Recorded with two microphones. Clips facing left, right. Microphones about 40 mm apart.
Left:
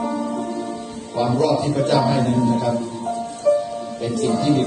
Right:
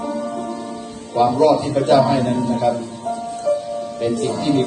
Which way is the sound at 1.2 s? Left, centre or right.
Right.